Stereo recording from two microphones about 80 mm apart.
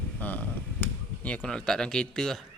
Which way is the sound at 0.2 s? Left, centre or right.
Left.